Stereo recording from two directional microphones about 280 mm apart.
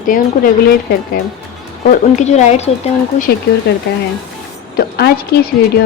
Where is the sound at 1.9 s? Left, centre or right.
Left.